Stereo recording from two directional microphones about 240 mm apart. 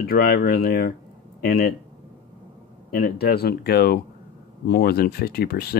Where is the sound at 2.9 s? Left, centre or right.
Left.